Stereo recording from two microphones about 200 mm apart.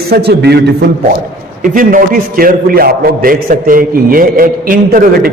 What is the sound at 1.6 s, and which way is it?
A man's voice, 40° right (ahead or behind).